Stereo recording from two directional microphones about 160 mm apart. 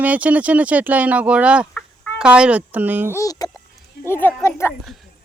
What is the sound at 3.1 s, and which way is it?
Speech, 20° left (ahead or behind).